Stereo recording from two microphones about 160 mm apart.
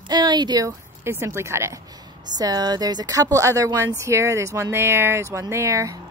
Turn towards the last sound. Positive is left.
turn(degrees=-20)  # may be behind; listen again after turning